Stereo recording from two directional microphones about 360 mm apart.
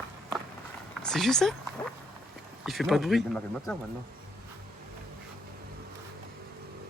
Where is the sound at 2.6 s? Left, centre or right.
Centre.